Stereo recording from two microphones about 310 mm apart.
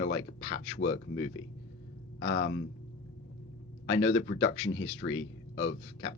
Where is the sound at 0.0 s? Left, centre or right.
Left.